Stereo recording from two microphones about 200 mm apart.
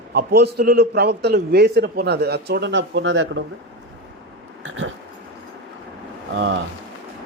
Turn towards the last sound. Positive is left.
turn(degrees=-65)  # may be behind; listen again after turning